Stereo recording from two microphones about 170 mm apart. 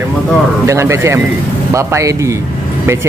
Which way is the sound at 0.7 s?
15° right (ahead or behind).